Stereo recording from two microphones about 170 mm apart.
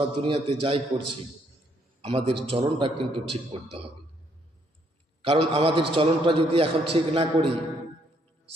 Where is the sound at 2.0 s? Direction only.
35° right (ahead or behind).